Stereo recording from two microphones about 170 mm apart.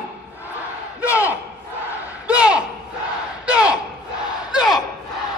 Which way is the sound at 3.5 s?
5° right (ahead or behind).